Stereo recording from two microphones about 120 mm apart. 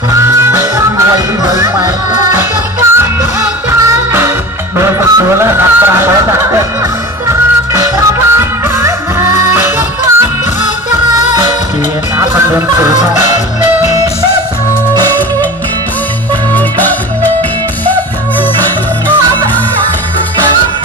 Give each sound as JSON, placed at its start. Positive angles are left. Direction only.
{"t": 0.1, "sound": "music", "side_deg": -20}
{"t": 2.3, "sound": "music", "side_deg": -20}
{"t": 4.7, "sound": "fowl", "side_deg": -20}
{"t": 7.7, "sound": "music", "side_deg": -20}
{"t": 12.2, "sound": "music", "side_deg": -20}
{"t": 16.5, "sound": "music", "side_deg": 15}